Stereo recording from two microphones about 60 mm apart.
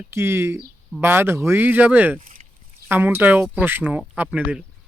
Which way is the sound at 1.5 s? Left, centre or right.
Right.